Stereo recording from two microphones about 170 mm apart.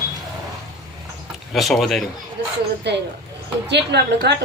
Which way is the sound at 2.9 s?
85° right.